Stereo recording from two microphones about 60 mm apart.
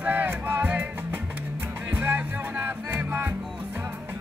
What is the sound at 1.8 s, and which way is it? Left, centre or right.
Music, right.